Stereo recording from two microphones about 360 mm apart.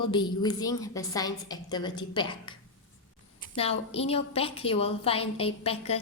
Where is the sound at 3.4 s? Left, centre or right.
Centre.